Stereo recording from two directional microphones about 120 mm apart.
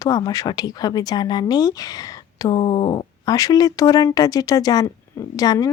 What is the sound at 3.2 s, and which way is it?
Speech, 30° left (ahead or behind).